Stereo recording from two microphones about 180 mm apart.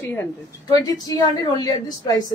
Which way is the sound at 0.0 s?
15° left (ahead or behind).